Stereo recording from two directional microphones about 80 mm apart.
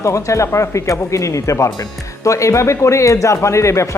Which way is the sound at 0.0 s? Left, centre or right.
Left.